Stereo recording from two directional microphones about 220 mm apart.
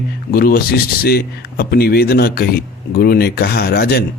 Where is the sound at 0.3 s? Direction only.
45° left (ahead or behind).